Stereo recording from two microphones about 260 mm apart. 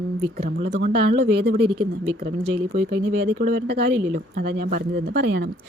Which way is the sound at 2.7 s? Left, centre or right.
Right.